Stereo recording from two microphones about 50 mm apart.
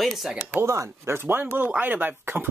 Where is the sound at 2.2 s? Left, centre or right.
Right.